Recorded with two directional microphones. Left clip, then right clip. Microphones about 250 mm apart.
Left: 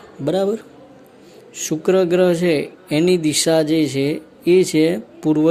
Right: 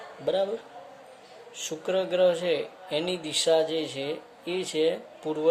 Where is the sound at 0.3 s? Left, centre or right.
Left.